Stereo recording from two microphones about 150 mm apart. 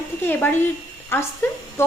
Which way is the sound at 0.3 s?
15° left (ahead or behind).